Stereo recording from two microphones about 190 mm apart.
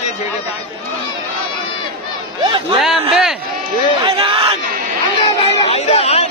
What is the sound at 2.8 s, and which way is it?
Speech, centre (ahead or behind).